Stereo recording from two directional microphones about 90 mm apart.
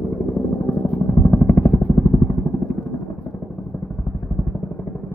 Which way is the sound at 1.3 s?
25° left (ahead or behind).